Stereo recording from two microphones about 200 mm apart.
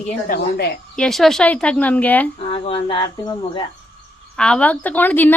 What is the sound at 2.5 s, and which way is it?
Speech, 25° left (ahead or behind).